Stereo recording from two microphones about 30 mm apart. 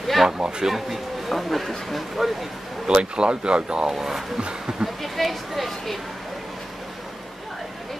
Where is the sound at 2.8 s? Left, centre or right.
Right.